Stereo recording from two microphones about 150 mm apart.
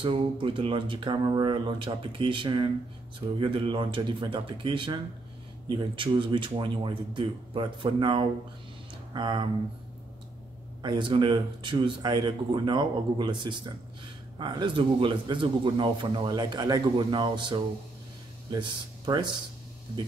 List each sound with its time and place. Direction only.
0.0 s speech: 35° right (ahead or behind)
10.8 s speech: 30° right (ahead or behind)